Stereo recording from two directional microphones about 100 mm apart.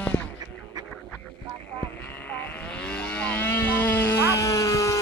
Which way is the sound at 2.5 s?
10° left (ahead or behind).